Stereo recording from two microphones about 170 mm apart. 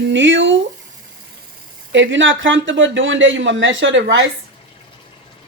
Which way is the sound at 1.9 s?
90° right.